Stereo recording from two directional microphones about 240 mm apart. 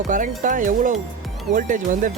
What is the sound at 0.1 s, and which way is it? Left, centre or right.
Speech, right.